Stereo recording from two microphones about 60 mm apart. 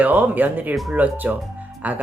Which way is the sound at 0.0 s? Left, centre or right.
Right.